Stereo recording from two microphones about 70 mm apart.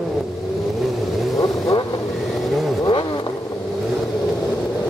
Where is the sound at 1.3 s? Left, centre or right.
Left.